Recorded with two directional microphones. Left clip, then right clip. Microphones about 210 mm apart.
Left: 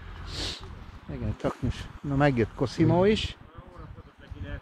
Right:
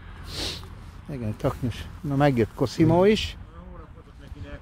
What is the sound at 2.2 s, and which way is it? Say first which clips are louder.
Speech: right 3 dB; 15° right (ahead or behind).